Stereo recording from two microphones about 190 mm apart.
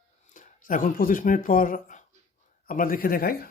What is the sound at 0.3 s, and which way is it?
Speech, 45° left (ahead or behind).